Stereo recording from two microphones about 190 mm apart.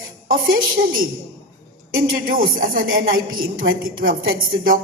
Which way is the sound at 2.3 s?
50° right (ahead or behind).